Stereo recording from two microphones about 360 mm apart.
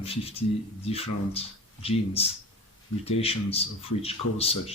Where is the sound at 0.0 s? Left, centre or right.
Centre.